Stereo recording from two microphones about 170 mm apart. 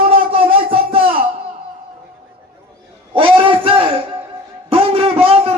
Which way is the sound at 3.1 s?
30° right (ahead or behind).